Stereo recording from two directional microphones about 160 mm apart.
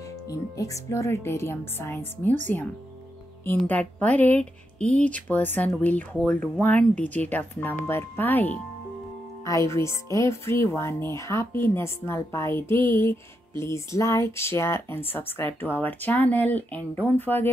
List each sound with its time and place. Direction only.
0.3 s music: 20° left (ahead or behind)